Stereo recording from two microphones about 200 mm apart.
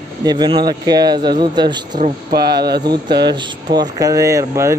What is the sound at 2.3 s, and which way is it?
Speech, 55° right (ahead or behind).